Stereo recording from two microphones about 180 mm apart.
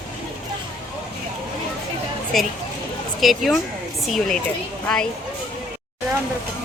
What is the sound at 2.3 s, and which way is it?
Speech, centre (ahead or behind).